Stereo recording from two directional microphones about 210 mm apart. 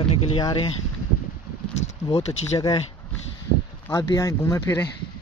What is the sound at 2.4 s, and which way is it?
Speech, 15° left (ahead or behind).